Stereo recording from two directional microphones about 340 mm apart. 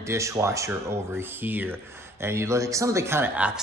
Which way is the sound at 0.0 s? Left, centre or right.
Centre.